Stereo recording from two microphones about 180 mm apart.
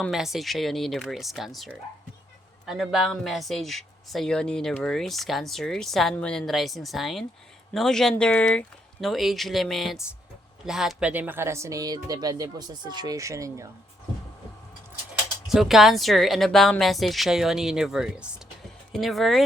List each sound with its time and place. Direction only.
0.0 s speech: centre (ahead or behind); by 13.7 s 15° right (ahead or behind)
15.4 s speech: centre (ahead or behind)